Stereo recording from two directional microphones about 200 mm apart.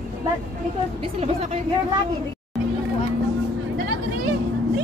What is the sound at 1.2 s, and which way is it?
Speech, 30° right (ahead or behind).